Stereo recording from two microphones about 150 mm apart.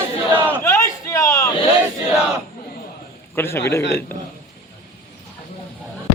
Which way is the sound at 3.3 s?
15° left (ahead or behind).